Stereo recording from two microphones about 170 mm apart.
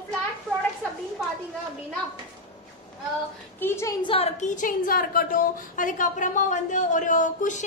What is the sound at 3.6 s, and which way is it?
A woman's voice, 15° left (ahead or behind).